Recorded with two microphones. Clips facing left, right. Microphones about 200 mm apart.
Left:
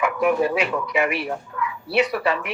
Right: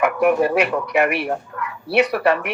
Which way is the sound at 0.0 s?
55° right (ahead or behind).